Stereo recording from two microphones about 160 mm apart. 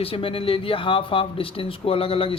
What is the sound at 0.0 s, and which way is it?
Speech, 35° left (ahead or behind).